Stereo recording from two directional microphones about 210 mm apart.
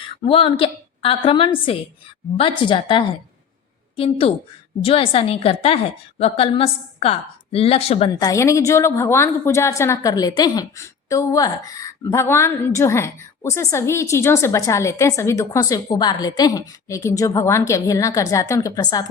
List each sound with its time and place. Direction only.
0.2 s a woman's voice: 25° left (ahead or behind)
8.2 s a woman's voice: 15° left (ahead or behind)